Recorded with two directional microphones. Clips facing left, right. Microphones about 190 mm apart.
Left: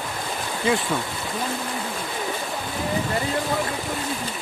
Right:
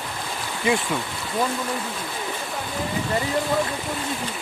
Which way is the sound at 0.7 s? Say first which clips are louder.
Even; 15° right (ahead or behind).